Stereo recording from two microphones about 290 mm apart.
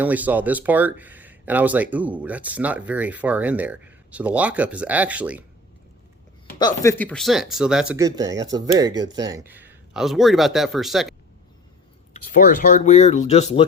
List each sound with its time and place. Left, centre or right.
0.0 s speech: centre
6.6 s speech: centre
12.1 s speech: left